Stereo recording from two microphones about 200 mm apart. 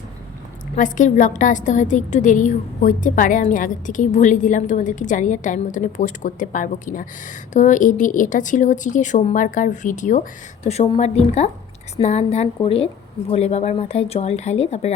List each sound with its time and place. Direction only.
0.8 s a woman's voice: 40° left (ahead or behind)